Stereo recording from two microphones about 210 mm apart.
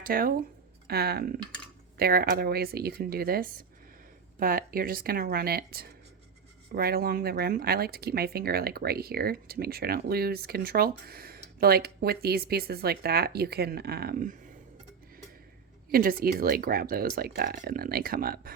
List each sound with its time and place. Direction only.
0.0 s speech: 45° right (ahead or behind)
15.9 s speech: 45° right (ahead or behind)